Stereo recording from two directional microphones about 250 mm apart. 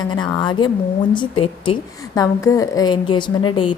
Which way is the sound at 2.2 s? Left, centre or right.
Centre.